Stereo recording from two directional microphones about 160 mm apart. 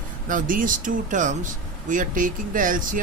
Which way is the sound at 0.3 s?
60° right (ahead or behind).